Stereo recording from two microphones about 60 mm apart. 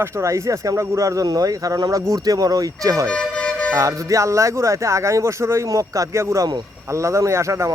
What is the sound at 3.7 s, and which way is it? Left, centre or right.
Speech, right.